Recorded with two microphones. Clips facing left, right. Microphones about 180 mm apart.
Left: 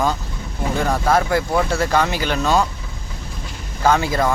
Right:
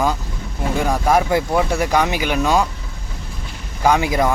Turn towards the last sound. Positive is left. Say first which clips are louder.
# right 1 dB
turn(degrees=-15)  # may be behind; listen again after turning